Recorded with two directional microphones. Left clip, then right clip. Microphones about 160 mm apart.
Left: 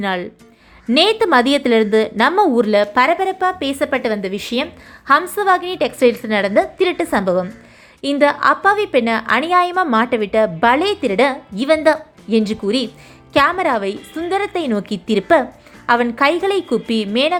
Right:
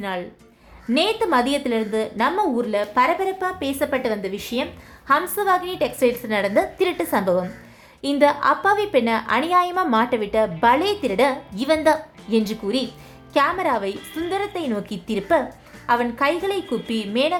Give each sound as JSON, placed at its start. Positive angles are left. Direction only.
{"t": 0.0, "sound": "a woman's voice", "side_deg": 35}